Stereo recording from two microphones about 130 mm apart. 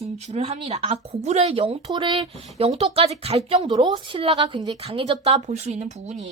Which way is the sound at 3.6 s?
35° right (ahead or behind).